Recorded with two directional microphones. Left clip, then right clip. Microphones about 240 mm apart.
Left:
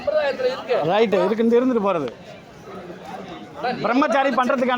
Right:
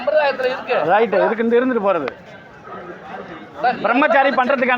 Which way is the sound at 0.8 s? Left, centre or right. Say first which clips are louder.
Right 4 dB; left.